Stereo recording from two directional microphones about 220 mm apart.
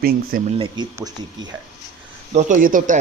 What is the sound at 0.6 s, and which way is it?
Speech, 15° right (ahead or behind).